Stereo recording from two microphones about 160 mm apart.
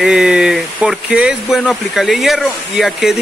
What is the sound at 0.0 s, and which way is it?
Speech, 5° right (ahead or behind).